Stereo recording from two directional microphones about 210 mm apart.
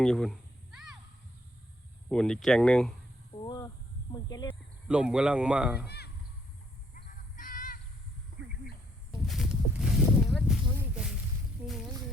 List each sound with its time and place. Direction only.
0.0 s cat: centre (ahead or behind)
2.0 s speech: 5° left (ahead or behind)
3.4 s a sound: 20° left (ahead or behind)
4.1 s speech: 20° left (ahead or behind)
4.9 s speech: 5° right (ahead or behind)
6.9 s music: 40° left (ahead or behind)
9.2 s speech: centre (ahead or behind)